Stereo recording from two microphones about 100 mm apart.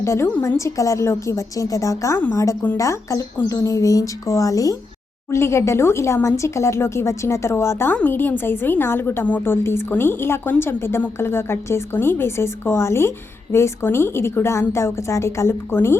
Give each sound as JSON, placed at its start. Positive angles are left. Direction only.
{"t": 0.0, "sound": "a woman's voice", "side_deg": 25}